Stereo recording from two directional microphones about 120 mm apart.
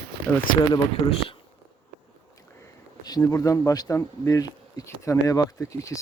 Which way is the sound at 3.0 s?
35° left (ahead or behind).